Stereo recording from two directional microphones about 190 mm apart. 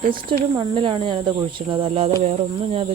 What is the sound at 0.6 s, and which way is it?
Speech, 25° right (ahead or behind).